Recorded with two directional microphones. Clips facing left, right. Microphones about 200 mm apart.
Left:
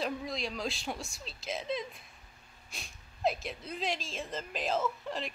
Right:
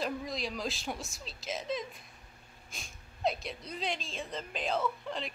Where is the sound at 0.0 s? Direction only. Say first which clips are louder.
Even; centre (ahead or behind).